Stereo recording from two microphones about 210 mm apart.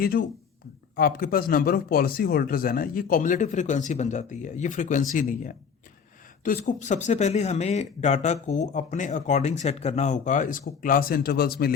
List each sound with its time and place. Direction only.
0.0 s speech: 45° left (ahead or behind)